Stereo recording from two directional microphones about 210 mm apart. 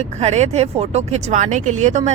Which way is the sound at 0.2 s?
30° right (ahead or behind).